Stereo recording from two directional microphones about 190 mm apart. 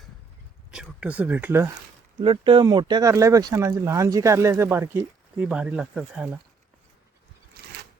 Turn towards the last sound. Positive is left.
turn(degrees=-5)  # may be behind; listen again after turning